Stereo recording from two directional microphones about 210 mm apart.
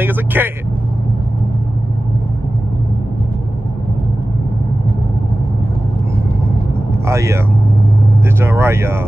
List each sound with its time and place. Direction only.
0.0 s vehicle: 10° right (ahead or behind)
6.9 s vehicle: 15° right (ahead or behind)
8.4 s speech: 10° right (ahead or behind)